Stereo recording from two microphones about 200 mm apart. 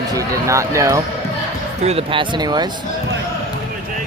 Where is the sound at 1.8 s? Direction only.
30° right (ahead or behind).